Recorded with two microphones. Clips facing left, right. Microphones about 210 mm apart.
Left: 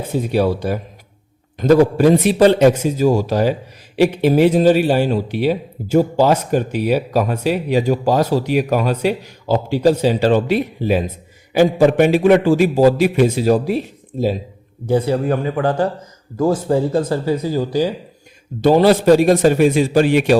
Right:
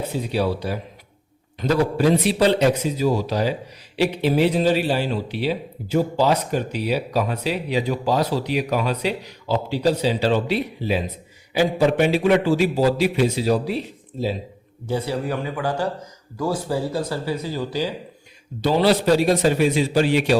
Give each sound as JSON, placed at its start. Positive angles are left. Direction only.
{"t": 0.1, "sound": "a man's voice", "side_deg": 50}